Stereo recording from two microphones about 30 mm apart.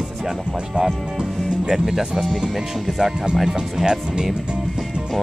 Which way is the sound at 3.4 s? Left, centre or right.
Right.